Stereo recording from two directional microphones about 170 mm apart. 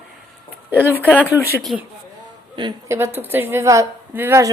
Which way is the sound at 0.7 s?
10° right (ahead or behind).